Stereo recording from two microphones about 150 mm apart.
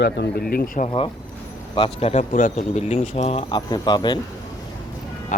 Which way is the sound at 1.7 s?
40° left (ahead or behind).